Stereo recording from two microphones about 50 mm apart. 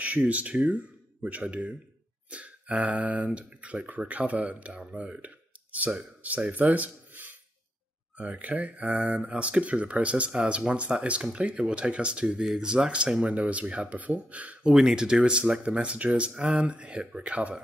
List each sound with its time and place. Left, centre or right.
0.0 s speech: right
14.6 s speech: centre